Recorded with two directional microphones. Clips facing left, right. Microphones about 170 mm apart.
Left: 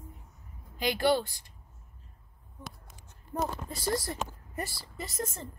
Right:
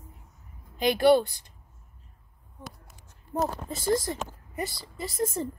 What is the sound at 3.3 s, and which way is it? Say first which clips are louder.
Speech: right 4 dB; 20° right (ahead or behind).